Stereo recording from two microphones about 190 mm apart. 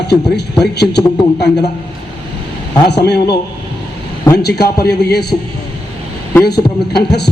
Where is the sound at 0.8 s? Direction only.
60° left (ahead or behind).